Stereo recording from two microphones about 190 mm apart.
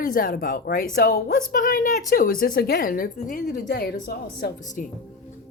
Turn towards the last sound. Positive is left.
turn(degrees=50)  # may be behind; listen again after turning